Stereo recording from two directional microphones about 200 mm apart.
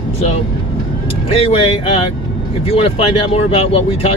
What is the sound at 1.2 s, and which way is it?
Speech, 30° left (ahead or behind).